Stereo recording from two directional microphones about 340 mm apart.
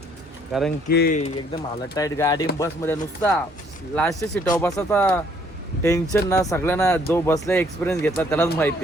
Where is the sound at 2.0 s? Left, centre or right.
Centre.